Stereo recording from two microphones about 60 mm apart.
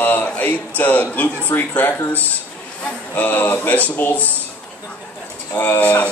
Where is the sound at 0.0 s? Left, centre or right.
Left.